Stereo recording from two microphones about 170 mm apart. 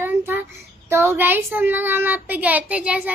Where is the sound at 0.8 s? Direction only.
15° right (ahead or behind).